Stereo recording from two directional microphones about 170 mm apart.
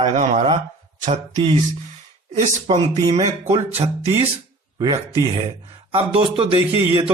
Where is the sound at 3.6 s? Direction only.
35° right (ahead or behind).